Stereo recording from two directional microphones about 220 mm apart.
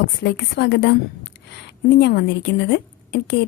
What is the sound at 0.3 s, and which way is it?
A woman's voice, 50° left (ahead or behind).